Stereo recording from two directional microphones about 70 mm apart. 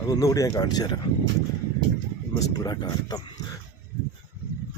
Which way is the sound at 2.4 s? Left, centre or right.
Left.